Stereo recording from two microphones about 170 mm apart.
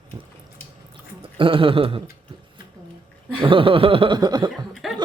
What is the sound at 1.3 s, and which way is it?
Chuckle, 30° right (ahead or behind).